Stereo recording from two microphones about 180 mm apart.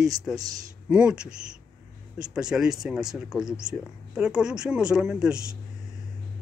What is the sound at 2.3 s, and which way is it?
Speech, 5° right (ahead or behind).